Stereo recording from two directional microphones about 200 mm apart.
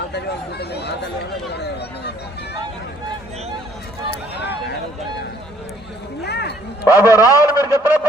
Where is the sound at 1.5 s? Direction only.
55° left (ahead or behind).